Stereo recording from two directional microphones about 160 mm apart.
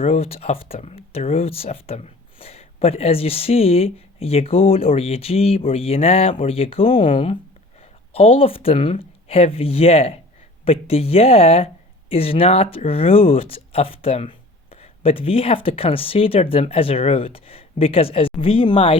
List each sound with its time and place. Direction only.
0.0 s speech: 40° left (ahead or behind)